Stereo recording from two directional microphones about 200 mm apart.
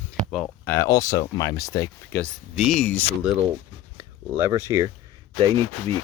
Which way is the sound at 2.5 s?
Centre (ahead or behind).